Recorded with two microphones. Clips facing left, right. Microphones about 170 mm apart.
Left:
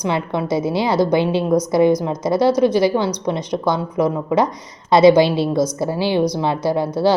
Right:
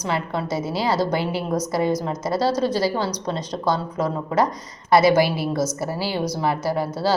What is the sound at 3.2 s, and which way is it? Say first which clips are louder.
A woman's voice: left 4 dB; 10° left (ahead or behind).